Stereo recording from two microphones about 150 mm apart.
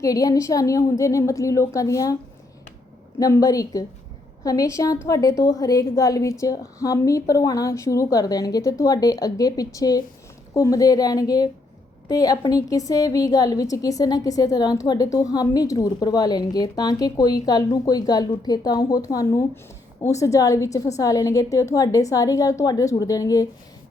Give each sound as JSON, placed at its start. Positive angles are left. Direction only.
{"t": 0.0, "sound": "a woman's voice", "side_deg": 20}
{"t": 3.2, "sound": "a woman's voice", "side_deg": 20}